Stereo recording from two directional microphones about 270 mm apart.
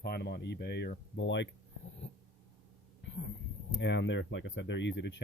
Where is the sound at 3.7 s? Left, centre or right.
Left.